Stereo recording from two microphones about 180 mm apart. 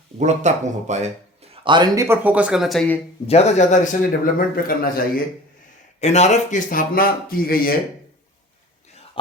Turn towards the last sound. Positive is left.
turn(degrees=55)  # may be behind; listen again after turning